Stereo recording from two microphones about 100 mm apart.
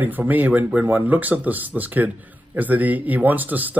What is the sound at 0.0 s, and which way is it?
Speech, 20° right (ahead or behind).